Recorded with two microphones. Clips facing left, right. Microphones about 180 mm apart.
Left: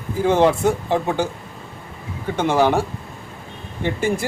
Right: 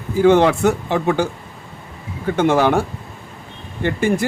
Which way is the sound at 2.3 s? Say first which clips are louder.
Right 2 dB; 55° right (ahead or behind).